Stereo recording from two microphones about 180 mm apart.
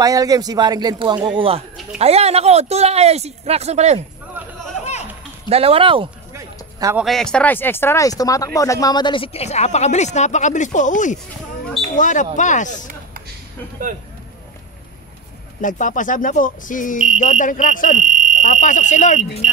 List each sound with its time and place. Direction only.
0.0 s speech: 20° right (ahead or behind); by 4.0 s 35° right (ahead or behind)
5.5 s speech: 30° right (ahead or behind)
6.3 s a sound: 15° right (ahead or behind)
7.0 s speech: centre (ahead or behind); by 12.7 s 45° left (ahead or behind)
15.6 s speech: 45° left (ahead or behind)
18.0 s fire alarm: 45° right (ahead or behind)
18.4 s speech: 40° left (ahead or behind)